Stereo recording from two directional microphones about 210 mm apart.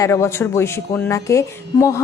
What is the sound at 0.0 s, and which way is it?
Speech, 15° left (ahead or behind).